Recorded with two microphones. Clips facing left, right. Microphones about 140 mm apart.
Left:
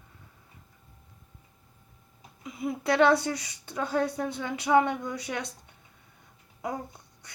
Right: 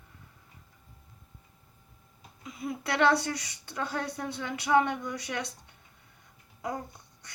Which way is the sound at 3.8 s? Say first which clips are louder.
Left 6 dB; 10° left (ahead or behind).